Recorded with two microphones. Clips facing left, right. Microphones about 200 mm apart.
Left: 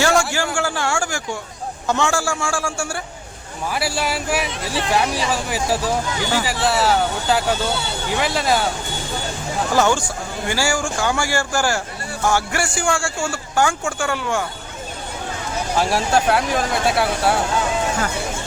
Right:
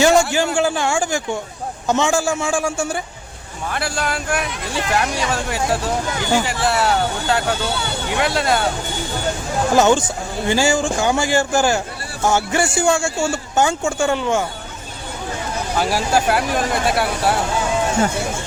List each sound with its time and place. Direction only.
0.0 s a man's voice: 20° right (ahead or behind)
3.7 s speech: 5° left (ahead or behind)
9.7 s speech: 20° right (ahead or behind)
15.7 s speech: centre (ahead or behind)